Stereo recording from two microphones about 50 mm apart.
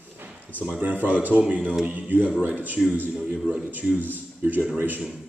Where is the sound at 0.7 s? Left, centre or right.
Right.